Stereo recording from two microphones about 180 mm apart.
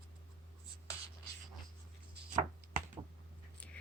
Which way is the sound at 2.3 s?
45° right (ahead or behind).